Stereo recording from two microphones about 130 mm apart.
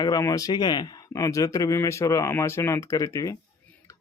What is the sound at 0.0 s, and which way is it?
Speech, 30° left (ahead or behind).